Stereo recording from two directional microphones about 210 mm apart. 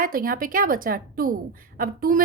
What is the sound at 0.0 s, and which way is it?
A woman's voice, 40° right (ahead or behind).